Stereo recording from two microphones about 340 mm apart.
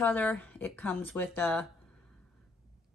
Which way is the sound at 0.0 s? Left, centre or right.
Centre.